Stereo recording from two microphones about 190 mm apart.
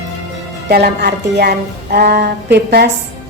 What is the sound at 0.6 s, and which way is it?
A woman's voice, 60° right (ahead or behind).